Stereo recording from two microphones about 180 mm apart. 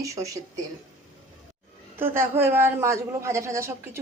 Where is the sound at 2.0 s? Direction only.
10° right (ahead or behind).